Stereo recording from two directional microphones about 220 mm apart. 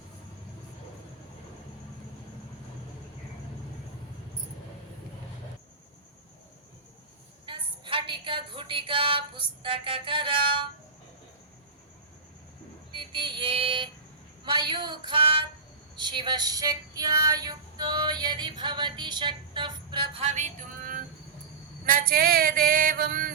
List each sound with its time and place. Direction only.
7.4 s a woman's voice: 25° right (ahead or behind)
12.9 s a sound: 20° right (ahead or behind)
16.0 s female singing: 20° right (ahead or behind); by 23.3 s 40° right (ahead or behind)